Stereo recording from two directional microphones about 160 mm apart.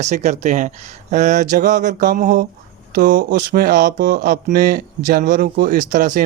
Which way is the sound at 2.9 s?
55° right (ahead or behind).